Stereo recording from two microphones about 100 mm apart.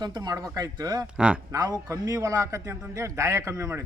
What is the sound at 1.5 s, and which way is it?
A man's voice, 35° right (ahead or behind).